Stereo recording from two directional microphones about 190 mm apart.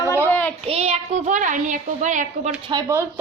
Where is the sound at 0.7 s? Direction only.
35° right (ahead or behind).